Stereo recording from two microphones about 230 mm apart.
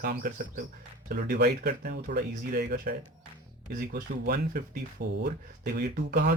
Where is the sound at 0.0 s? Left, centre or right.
Right.